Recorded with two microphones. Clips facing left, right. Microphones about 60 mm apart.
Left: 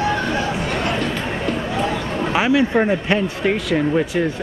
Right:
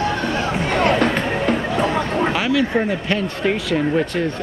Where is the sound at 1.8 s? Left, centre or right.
Right.